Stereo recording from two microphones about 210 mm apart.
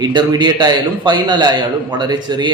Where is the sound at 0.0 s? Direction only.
20° right (ahead or behind).